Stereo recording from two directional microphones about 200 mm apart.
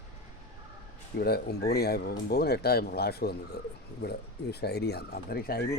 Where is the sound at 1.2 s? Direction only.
50° left (ahead or behind).